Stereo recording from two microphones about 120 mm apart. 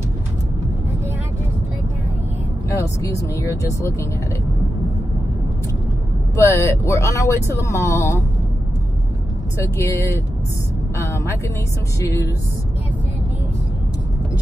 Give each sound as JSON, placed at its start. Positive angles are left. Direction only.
{"t": 2.8, "sound": "speech", "side_deg": 25}
{"t": 6.3, "sound": "speech", "side_deg": 25}
{"t": 9.8, "sound": "speech", "side_deg": 25}
{"t": 12.0, "sound": "speech", "side_deg": 25}